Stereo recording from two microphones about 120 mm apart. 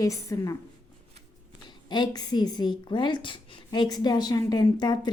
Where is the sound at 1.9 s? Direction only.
35° left (ahead or behind).